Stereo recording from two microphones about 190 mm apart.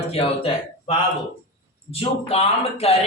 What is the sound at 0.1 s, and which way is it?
Speech, 30° left (ahead or behind).